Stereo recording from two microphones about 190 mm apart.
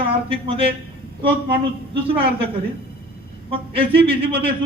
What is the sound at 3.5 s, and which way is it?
A man's voice, 30° right (ahead or behind).